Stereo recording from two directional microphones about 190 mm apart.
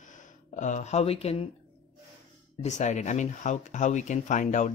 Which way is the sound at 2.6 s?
40° left (ahead or behind).